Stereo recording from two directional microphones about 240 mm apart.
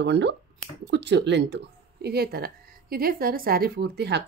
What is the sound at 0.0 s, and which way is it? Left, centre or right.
A woman's voice, right.